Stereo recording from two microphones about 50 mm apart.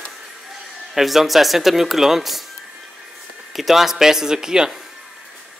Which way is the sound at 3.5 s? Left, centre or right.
Centre.